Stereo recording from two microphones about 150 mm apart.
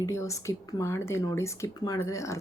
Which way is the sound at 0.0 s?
20° left (ahead or behind).